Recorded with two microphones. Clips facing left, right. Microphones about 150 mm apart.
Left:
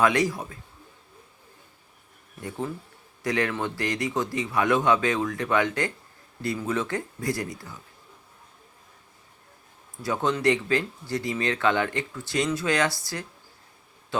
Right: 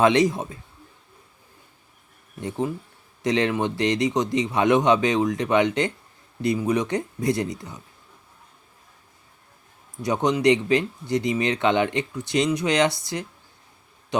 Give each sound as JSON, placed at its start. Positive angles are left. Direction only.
{"t": 0.0, "sound": "speech", "side_deg": -20}
{"t": 2.4, "sound": "speech", "side_deg": -20}
{"t": 10.0, "sound": "speech", "side_deg": -20}